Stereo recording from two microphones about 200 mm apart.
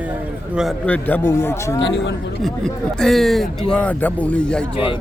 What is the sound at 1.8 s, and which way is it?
Speech, 60° left (ahead or behind).